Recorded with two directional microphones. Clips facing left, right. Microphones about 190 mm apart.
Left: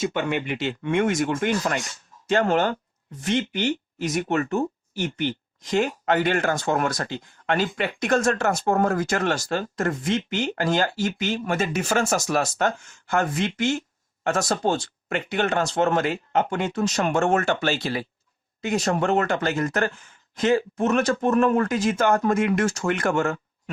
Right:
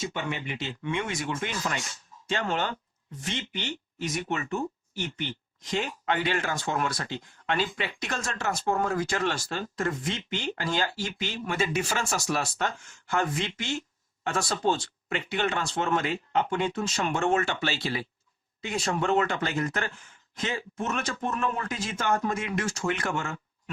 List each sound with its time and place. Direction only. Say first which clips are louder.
0.0 s speech: left 8 dB; 65° left (ahead or behind); by 23.7 s 45° left (ahead or behind)